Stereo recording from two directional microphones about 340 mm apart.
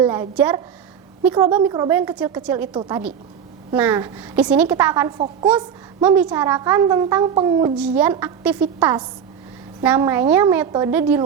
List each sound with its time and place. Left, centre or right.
0.0 s a woman's voice: centre